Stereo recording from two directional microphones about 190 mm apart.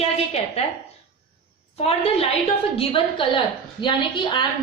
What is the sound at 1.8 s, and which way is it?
A woman's voice, 30° left (ahead or behind).